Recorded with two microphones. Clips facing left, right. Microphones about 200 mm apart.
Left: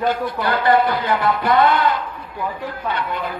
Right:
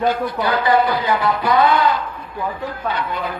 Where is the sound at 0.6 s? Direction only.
55° left (ahead or behind).